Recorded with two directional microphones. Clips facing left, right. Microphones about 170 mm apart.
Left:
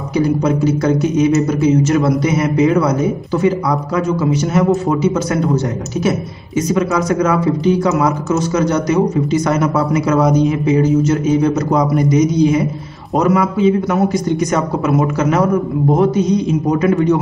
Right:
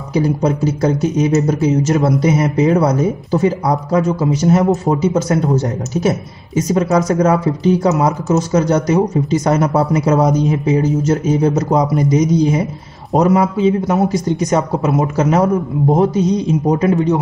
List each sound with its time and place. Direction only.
0.1 s speech: 35° right (ahead or behind)